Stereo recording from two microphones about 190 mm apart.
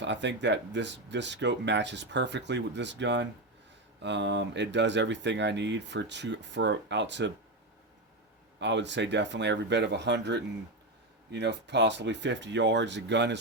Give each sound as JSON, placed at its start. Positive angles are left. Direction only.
{"t": 0.0, "sound": "speech", "side_deg": -70}
{"t": 8.5, "sound": "speech", "side_deg": -70}